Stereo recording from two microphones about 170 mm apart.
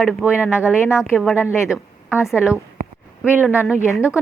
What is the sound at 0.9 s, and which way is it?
A woman's voice, 15° left (ahead or behind).